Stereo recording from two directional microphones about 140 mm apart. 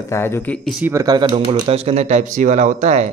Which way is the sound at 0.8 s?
25° right (ahead or behind).